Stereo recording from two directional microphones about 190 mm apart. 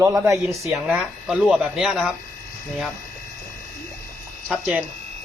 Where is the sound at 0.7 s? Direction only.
5° right (ahead or behind).